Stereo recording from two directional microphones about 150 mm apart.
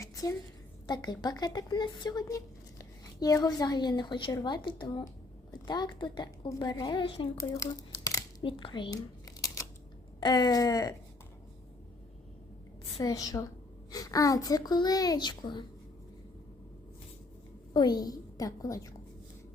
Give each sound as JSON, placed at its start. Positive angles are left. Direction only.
{"t": 0.0, "sound": "a sound", "side_deg": 20}
{"t": 0.9, "sound": "speech", "side_deg": 25}
{"t": 7.3, "sound": "crumpling", "side_deg": 20}
{"t": 8.4, "sound": "a sound", "side_deg": 35}
{"t": 10.2, "sound": "speech", "side_deg": 30}
{"t": 13.0, "sound": "speech", "side_deg": 25}
{"t": 17.7, "sound": "speech", "side_deg": 25}